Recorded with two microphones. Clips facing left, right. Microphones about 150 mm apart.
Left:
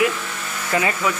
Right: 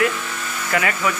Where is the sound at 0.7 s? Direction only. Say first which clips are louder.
Left 1 dB; 30° left (ahead or behind).